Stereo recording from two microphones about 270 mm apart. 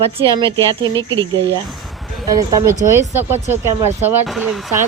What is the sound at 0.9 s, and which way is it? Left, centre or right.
Speech, centre.